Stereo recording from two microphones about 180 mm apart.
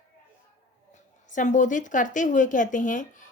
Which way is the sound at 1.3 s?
45° left (ahead or behind).